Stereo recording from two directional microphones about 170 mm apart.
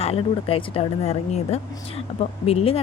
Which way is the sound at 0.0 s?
35° left (ahead or behind).